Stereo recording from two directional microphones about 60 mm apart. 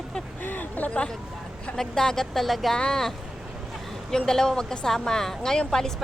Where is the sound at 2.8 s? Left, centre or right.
Centre.